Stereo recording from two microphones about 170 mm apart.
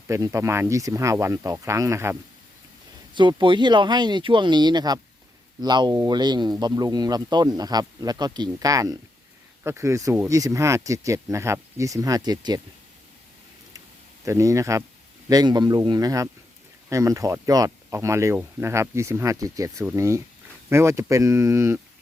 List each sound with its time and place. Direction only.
0.1 s speech: 15° right (ahead or behind)
3.2 s speech: 25° right (ahead or behind)
14.3 s speech: 20° right (ahead or behind)